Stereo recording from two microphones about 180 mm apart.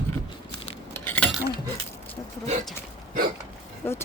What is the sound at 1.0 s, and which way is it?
Chink, 10° left (ahead or behind).